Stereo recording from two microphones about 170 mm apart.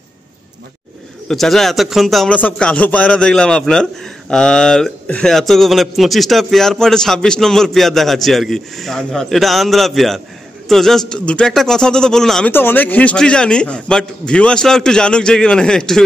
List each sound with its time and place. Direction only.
1.3 s a man's voice: centre (ahead or behind)